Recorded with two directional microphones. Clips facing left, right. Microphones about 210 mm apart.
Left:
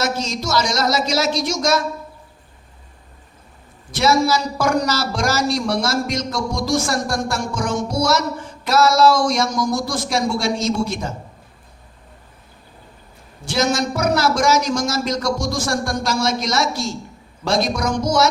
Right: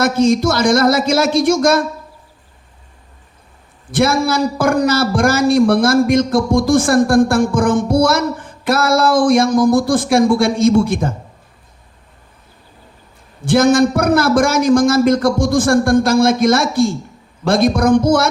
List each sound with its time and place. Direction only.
0.0 s a man's voice: 55° right (ahead or behind)
3.9 s a man's voice: 55° right (ahead or behind)
13.4 s a man's voice: 55° right (ahead or behind)